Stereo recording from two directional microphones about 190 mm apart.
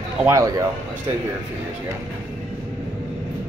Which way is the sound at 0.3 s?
15° right (ahead or behind).